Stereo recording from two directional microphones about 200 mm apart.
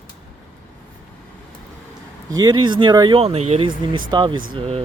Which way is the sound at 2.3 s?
20° right (ahead or behind).